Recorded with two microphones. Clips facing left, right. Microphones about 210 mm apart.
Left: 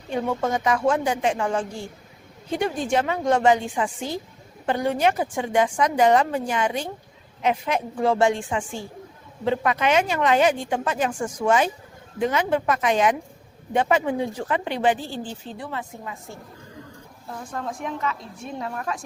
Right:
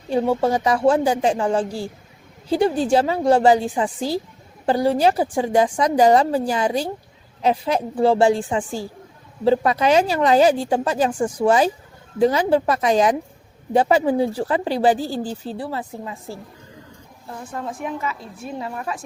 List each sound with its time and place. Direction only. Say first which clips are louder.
0.1 s speech: right 5 dB; 30° right (ahead or behind)
17.2 s a woman's voice: right 1 dB; 5° right (ahead or behind)